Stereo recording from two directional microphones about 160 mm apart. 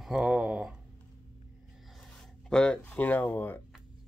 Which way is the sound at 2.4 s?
5° left (ahead or behind).